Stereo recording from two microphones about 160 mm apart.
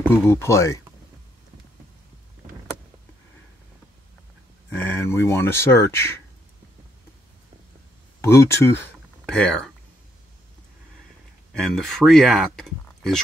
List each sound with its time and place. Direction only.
0.0 s speech: 15° left (ahead or behind)
4.6 s speech: 15° left (ahead or behind)
8.3 s speech: 15° left (ahead or behind)
11.6 s speech: centre (ahead or behind)